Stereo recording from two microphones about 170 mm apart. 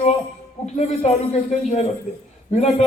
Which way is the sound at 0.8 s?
40° left (ahead or behind).